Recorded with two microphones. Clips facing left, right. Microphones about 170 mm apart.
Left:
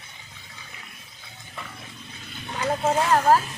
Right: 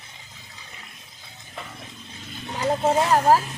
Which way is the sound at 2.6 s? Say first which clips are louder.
Right 2 dB; 15° right (ahead or behind).